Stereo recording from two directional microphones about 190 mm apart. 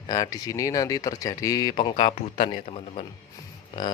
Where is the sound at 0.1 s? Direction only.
20° left (ahead or behind).